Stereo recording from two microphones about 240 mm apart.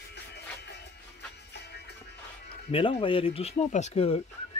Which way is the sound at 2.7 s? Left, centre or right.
Left.